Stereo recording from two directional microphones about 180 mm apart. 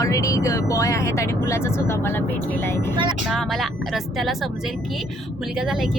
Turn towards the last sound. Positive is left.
turn(degrees=0)  # may be behind; listen again after turning